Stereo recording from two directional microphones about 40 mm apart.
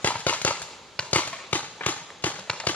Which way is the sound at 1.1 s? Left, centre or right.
Left.